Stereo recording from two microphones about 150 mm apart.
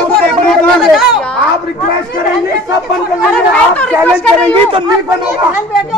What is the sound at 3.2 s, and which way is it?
Speech, 5° left (ahead or behind).